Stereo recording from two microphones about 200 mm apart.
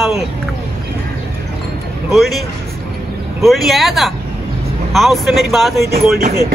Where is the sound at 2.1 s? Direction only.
Centre (ahead or behind).